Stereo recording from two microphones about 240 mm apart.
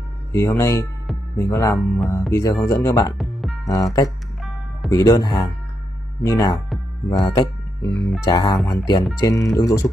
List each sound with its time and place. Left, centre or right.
0.3 s speech: centre
3.2 s music: centre
3.6 s speech: centre